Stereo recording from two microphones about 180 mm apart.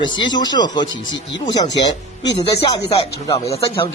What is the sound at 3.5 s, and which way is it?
Speech, 30° left (ahead or behind).